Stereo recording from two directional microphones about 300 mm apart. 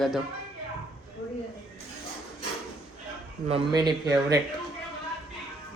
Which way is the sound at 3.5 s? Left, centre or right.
Centre.